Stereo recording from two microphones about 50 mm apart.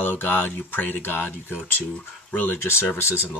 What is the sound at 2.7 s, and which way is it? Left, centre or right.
Speech, left.